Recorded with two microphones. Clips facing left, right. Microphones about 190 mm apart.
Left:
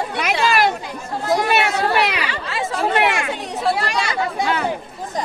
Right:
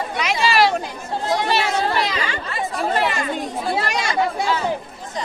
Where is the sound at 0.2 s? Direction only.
55° left (ahead or behind).